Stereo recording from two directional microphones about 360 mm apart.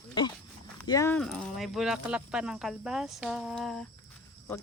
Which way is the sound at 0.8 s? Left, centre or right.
Centre.